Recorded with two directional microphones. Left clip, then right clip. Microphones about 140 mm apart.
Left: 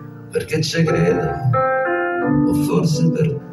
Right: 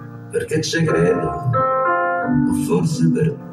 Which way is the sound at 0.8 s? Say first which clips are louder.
Even; 20° right (ahead or behind).